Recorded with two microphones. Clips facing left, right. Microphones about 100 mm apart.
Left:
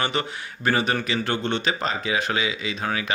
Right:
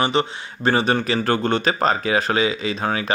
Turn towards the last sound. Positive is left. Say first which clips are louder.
# right 4 dB
turn(degrees=-40)  # may be behind; listen again after turning